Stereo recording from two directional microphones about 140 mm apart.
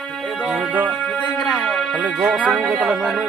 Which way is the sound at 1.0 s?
10° left (ahead or behind).